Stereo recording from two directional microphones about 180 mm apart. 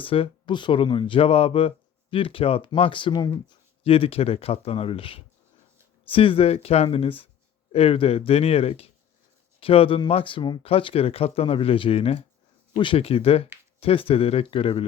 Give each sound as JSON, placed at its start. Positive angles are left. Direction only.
{"t": 0.0, "sound": "speech", "side_deg": 30}